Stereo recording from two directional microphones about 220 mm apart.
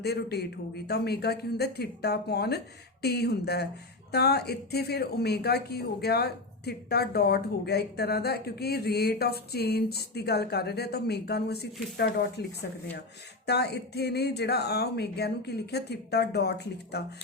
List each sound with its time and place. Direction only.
0.0 s speech: 45° left (ahead or behind)
13.5 s speech: 50° left (ahead or behind)